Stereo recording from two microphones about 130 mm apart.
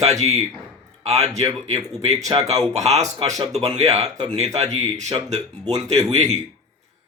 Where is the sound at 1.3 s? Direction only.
25° right (ahead or behind).